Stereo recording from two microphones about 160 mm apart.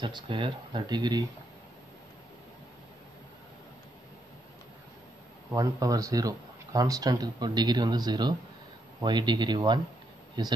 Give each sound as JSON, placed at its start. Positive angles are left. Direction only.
{"t": 0.0, "sound": "speech", "side_deg": -30}
{"t": 5.5, "sound": "speech", "side_deg": -20}